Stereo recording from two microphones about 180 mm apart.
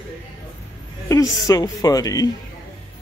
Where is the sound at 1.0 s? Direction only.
20° left (ahead or behind).